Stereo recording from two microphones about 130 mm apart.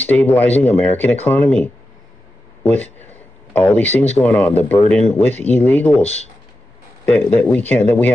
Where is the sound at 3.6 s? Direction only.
15° left (ahead or behind).